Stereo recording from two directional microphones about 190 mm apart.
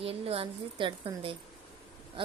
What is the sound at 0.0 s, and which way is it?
A woman's voice, 30° right (ahead or behind).